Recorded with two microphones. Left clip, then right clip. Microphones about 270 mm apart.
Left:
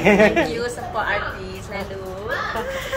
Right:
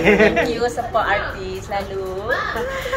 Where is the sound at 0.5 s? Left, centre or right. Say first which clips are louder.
Right 5 dB; centre.